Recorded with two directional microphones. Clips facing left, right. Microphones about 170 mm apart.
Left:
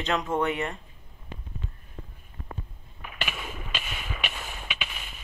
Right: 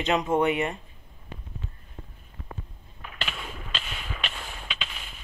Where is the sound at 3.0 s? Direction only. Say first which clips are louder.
Left 1 dB; 10° left (ahead or behind).